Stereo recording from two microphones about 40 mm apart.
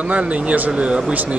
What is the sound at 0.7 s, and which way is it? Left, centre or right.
Speech, right.